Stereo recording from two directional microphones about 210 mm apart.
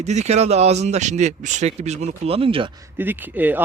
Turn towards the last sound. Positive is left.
turn(degrees=-10)  # may be behind; listen again after turning